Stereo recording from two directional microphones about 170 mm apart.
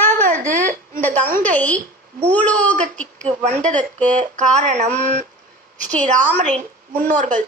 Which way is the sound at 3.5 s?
45° right (ahead or behind).